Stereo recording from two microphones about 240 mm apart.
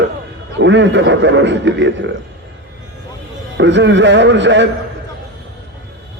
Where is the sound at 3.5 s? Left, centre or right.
Right.